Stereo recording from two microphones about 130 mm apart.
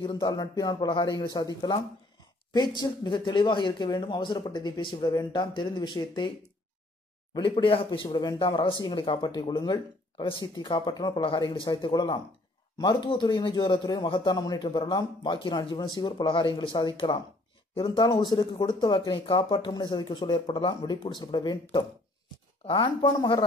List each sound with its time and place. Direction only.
0.0 s speech: 35° left (ahead or behind)
2.8 s speech: 35° left (ahead or behind)
7.3 s speech: 40° left (ahead or behind)